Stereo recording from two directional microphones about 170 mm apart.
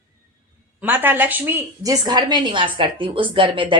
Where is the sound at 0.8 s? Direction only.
10° right (ahead or behind).